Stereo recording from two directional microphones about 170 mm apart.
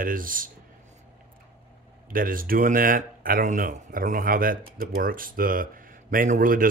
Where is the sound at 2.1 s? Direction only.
55° right (ahead or behind).